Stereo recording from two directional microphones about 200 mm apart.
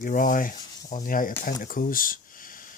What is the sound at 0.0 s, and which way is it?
Speech, 40° left (ahead or behind).